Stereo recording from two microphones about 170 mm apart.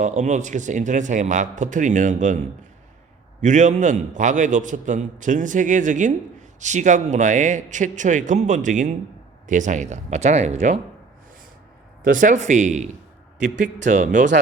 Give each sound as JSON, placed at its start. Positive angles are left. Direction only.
{"t": 0.0, "sound": "a man's voice", "side_deg": -45}
{"t": 3.4, "sound": "a man's voice", "side_deg": -45}
{"t": 12.0, "sound": "a man's voice", "side_deg": -50}